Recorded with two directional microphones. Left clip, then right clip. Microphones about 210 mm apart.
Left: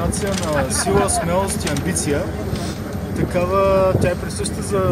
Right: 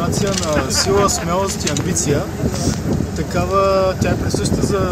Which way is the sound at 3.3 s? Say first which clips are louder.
Right 1 dB; 5° left (ahead or behind).